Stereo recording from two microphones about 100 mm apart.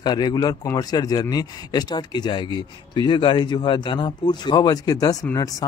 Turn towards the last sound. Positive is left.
turn(degrees=40)  # may be behind; listen again after turning